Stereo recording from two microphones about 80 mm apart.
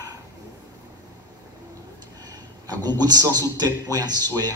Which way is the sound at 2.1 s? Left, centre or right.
Right.